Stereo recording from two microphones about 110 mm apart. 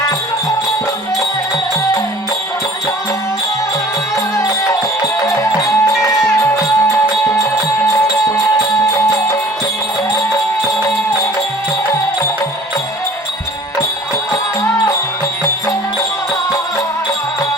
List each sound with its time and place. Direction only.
4.4 s music: 30° left (ahead or behind)